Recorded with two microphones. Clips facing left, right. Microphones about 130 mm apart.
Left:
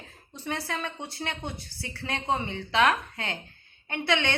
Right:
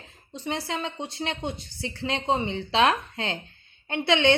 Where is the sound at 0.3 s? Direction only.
20° right (ahead or behind).